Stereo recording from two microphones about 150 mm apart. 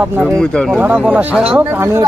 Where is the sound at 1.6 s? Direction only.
15° right (ahead or behind).